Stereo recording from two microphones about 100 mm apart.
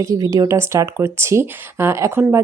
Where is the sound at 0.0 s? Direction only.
30° right (ahead or behind).